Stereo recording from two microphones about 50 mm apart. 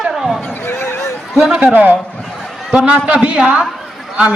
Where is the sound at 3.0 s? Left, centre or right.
Right.